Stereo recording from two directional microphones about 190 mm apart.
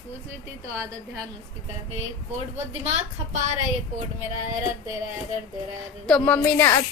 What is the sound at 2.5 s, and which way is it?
Speech, 35° right (ahead or behind).